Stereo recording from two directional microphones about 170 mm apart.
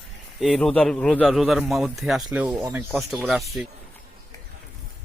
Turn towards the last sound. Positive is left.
turn(degrees=0)  # may be behind; listen again after turning